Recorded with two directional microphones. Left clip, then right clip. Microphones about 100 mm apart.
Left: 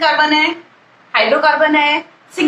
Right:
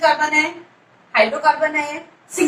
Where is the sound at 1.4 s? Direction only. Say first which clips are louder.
Left 5 dB; 40° left (ahead or behind).